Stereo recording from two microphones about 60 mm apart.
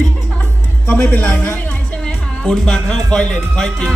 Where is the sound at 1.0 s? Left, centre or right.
Left.